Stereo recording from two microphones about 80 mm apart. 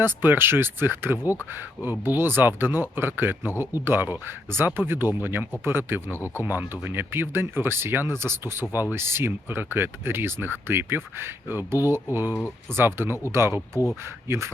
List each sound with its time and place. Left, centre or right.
0.0 s speech: right
6.1 s speech: left
6.4 s speech: right
13.7 s speech: left
14.3 s speech: right